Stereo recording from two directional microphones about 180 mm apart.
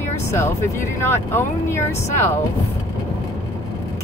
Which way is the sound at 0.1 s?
15° left (ahead or behind).